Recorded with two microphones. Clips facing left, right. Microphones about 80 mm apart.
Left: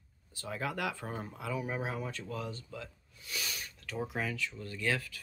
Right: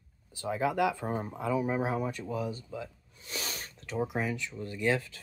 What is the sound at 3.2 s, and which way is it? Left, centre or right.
Sneeze, right.